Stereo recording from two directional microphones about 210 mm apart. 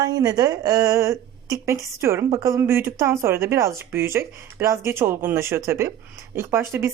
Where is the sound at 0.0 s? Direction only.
15° right (ahead or behind).